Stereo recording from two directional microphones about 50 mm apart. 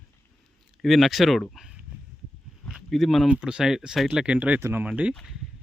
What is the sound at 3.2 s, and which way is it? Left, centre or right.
Speech, centre.